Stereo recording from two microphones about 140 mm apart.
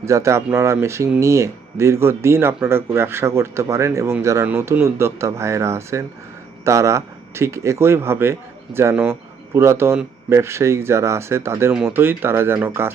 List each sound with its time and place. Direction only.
0.0 s speech: 20° right (ahead or behind)